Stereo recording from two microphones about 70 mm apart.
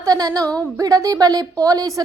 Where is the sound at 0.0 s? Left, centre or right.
Right.